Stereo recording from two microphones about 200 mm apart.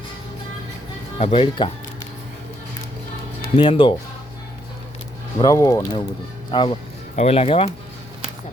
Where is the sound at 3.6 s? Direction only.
25° left (ahead or behind).